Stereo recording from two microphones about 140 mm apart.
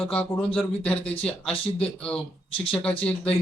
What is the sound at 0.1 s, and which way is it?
Speech, 10° left (ahead or behind).